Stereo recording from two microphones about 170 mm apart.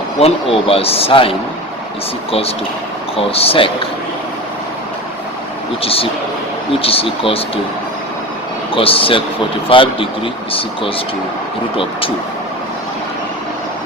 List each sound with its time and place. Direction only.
0.2 s a man's voice: 35° left (ahead or behind)
3.2 s a man's voice: 35° left (ahead or behind)
5.8 s a man's voice: 35° left (ahead or behind)
8.7 s a man's voice: 35° left (ahead or behind)